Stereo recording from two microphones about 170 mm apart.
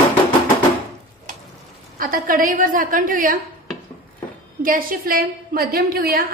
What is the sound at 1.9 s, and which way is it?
A woman's voice, 55° right (ahead or behind).